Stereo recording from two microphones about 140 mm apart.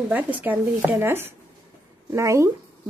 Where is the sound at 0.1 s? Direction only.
10° right (ahead or behind).